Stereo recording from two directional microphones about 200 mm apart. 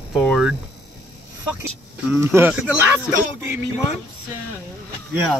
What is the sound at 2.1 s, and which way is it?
Speech, 10° right (ahead or behind).